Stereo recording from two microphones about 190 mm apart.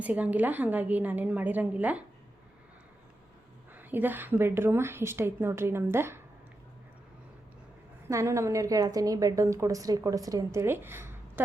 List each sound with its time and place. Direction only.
0.0 s a woman's voice: 10° right (ahead or behind)
3.8 s a woman's voice: 10° right (ahead or behind)
8.0 s a woman's voice: 15° right (ahead or behind)